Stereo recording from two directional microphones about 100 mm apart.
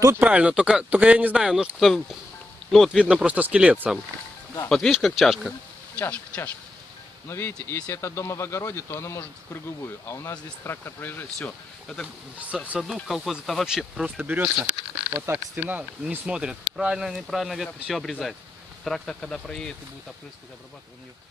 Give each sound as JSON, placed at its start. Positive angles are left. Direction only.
{"t": 0.1, "sound": "speech", "side_deg": -15}
{"t": 4.6, "sound": "speech", "side_deg": 5}
{"t": 5.9, "sound": "speech", "side_deg": 15}
{"t": 11.3, "sound": "speech", "side_deg": 10}
{"t": 12.4, "sound": "speech", "side_deg": -15}
{"t": 14.2, "sound": "speech", "side_deg": -15}
{"t": 18.9, "sound": "speech", "side_deg": 5}